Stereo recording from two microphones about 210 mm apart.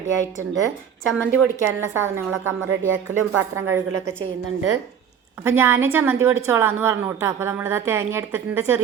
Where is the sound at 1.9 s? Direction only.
10° right (ahead or behind).